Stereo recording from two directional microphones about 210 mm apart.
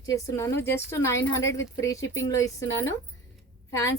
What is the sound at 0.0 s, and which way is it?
A woman's voice, 15° left (ahead or behind).